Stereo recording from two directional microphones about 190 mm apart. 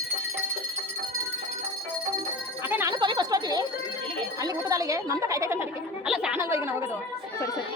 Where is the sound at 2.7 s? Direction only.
10° right (ahead or behind).